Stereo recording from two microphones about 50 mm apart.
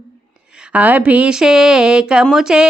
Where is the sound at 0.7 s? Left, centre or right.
Right.